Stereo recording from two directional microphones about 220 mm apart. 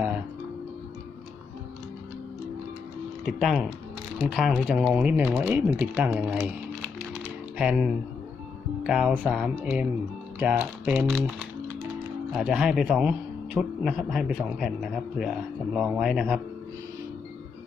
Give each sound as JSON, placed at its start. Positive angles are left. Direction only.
{"t": 3.3, "sound": "a man's voice", "side_deg": 0}